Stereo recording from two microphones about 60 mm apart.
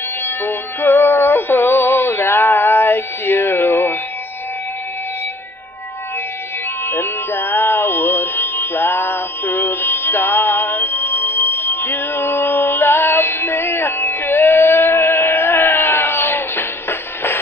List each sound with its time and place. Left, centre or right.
0.2 s music: left
6.9 s music: left